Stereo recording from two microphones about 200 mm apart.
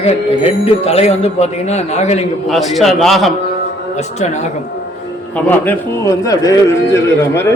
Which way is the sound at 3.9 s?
35° left (ahead or behind).